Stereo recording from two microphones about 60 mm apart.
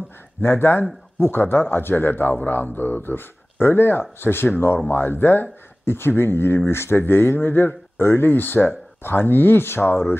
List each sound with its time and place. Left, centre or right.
0.4 s speech: left